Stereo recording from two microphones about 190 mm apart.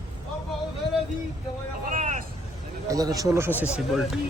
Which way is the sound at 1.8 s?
40° right (ahead or behind).